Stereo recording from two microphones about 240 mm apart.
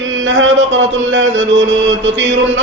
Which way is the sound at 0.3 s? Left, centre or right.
Right.